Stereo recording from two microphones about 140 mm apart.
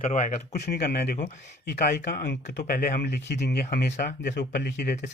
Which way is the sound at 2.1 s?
80° left.